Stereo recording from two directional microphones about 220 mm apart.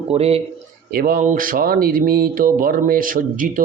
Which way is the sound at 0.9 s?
40° right (ahead or behind).